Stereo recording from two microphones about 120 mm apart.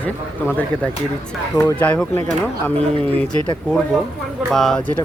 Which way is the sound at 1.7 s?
10° left (ahead or behind).